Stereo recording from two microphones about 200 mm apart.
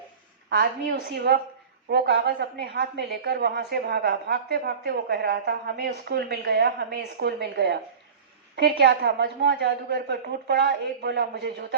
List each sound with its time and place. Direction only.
0.5 s a woman's voice: 50° right (ahead or behind)